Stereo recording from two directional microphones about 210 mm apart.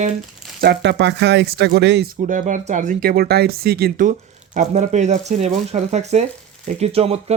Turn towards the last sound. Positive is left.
turn(degrees=-30)  # may be behind; listen again after turning